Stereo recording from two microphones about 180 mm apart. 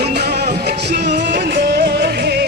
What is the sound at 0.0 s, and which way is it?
Music, 65° right (ahead or behind).